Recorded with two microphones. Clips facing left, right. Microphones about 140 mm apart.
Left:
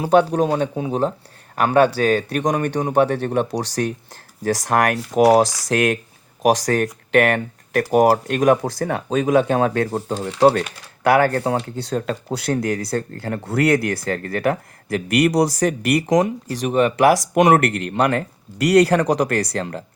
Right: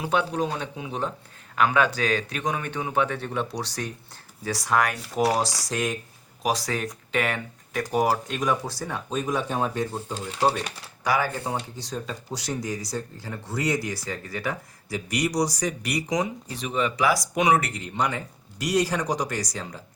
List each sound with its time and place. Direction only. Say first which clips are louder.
0.0 s speech: left 9 dB; 45° left (ahead or behind); by 3.9 s 65° left (ahead or behind)
4.4 s speech: left 6 dB; 50° left (ahead or behind); by 6.0 s 70° left (ahead or behind)
6.4 s speech: left 9 dB; 55° left (ahead or behind); by 19.8 s 70° left (ahead or behind)